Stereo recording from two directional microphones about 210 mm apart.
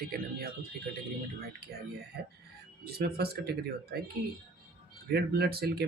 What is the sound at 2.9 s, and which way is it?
Speech, 50° right (ahead or behind).